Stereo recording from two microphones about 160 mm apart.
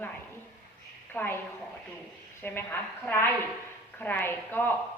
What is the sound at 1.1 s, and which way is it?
Speech, 10° left (ahead or behind).